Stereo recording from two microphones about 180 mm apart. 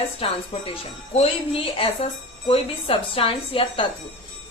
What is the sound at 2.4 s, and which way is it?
A woman's voice, 30° left (ahead or behind).